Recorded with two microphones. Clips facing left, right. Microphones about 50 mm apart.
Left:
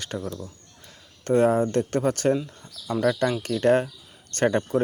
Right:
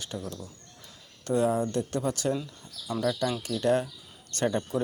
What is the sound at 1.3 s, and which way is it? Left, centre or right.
Speech, left.